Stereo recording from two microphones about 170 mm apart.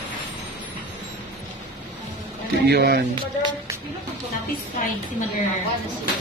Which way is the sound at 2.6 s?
70° right (ahead or behind).